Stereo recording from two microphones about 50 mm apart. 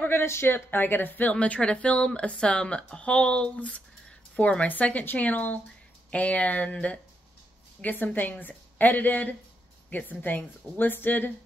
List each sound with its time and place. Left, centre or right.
0.0 s speech: left
0.7 s speech: left
1.3 s a woman's voice: left
7.8 s a woman's voice: left